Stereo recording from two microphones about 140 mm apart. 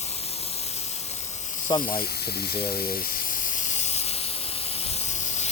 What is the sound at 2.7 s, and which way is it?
Speech, 90° left.